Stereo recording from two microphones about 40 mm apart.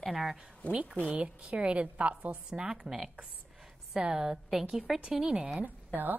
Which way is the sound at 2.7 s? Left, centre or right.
Centre.